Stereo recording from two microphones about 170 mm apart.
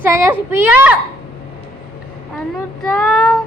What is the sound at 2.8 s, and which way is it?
Speech, 5° left (ahead or behind).